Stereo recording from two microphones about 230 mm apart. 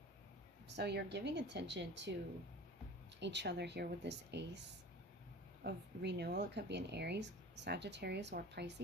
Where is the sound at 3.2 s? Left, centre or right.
Right.